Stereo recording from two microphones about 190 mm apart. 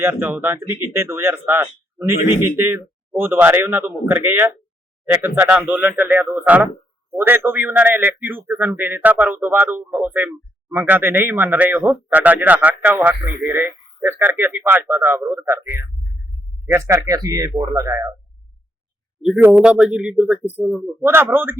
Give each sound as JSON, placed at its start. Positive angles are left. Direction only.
{"t": 0.0, "sound": "a man's voice", "side_deg": -10}
{"t": 19.2, "sound": "a man's voice", "side_deg": -5}